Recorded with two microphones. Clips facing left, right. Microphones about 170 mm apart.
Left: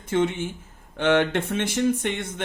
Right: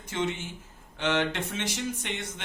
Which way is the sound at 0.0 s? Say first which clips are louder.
Left 8 dB; 55° left (ahead or behind).